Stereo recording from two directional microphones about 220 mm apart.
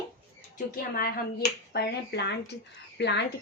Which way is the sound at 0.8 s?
40° left (ahead or behind).